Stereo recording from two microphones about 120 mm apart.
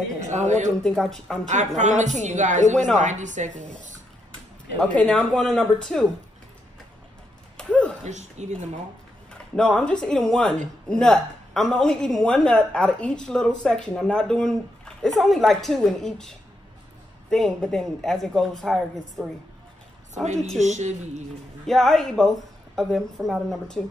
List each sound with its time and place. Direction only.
0.2 s a woman's voice: 85° right
0.8 s a woman's voice: 5° left (ahead or behind)
1.8 s a woman's voice: 85° right
4.7 s speech: 10° left (ahead or behind)
7.5 s a sound: 10° left (ahead or behind)
8.0 s speech: 75° right (ahead or behind)
9.3 s a woman's voice: 5° left (ahead or behind)
20.5 s a woman's voice: 75° right (ahead or behind)
21.6 s a woman's voice: centre (ahead or behind)